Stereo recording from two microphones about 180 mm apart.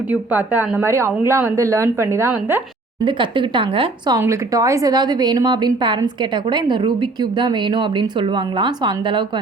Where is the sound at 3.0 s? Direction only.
25° right (ahead or behind).